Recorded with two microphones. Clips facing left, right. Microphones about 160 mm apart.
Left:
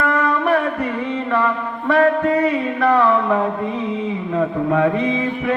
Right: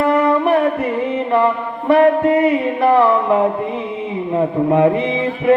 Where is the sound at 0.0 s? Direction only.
25° right (ahead or behind).